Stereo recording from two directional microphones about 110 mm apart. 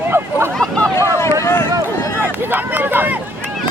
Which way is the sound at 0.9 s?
25° left (ahead or behind).